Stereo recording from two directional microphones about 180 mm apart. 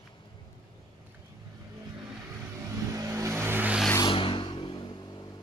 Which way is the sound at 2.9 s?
15° right (ahead or behind).